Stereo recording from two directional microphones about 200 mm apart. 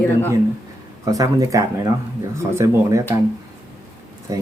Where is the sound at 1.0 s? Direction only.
15° right (ahead or behind).